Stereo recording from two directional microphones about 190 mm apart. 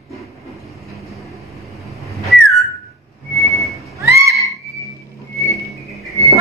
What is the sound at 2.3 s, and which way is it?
Whistling, centre (ahead or behind).